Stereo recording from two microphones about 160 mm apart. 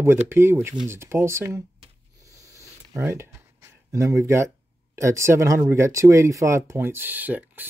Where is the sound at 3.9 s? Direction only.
20° right (ahead or behind).